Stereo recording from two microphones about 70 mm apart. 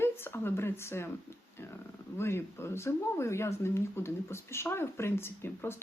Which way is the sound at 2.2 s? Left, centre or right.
Left.